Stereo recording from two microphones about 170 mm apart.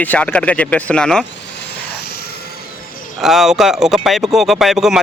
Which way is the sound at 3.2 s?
Centre (ahead or behind).